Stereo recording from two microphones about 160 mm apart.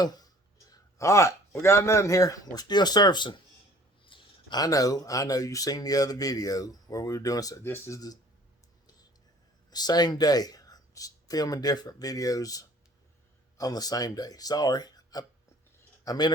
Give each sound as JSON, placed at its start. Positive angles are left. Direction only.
{"t": 0.0, "sound": "speech", "side_deg": 25}
{"t": 9.6, "sound": "speech", "side_deg": 25}